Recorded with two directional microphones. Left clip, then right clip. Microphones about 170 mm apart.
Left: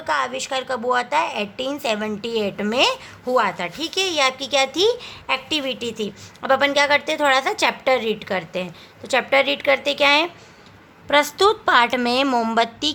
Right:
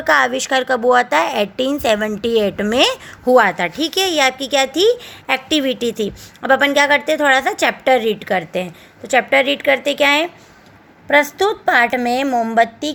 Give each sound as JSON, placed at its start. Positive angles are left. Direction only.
{"t": 0.0, "sound": "a woman's voice", "side_deg": -30}
{"t": 12.2, "sound": "speech", "side_deg": 5}
{"t": 12.8, "sound": "a woman's voice", "side_deg": -5}